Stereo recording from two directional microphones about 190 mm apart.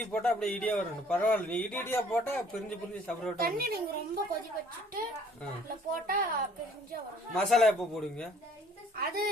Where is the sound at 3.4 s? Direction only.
55° right (ahead or behind).